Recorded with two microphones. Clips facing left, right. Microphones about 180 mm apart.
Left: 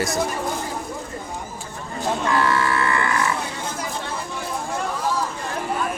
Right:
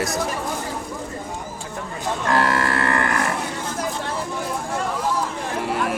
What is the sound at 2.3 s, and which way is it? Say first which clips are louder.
Livestock: right 2 dB; 45° right (ahead or behind).